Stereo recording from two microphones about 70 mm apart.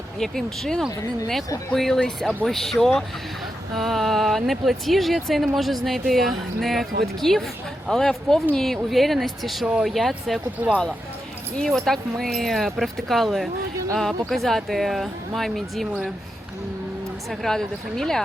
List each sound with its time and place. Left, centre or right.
0.2 s speech: centre
0.9 s speech: left
1.7 s speech: centre
11.6 s speech: centre
17.2 s speech: centre